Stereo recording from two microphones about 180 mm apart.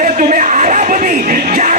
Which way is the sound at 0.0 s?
45° right (ahead or behind).